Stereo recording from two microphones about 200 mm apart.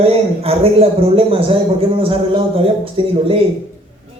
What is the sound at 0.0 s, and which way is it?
A man's voice, 30° right (ahead or behind).